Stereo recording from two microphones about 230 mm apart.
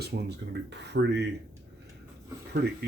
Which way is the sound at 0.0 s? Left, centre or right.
Right.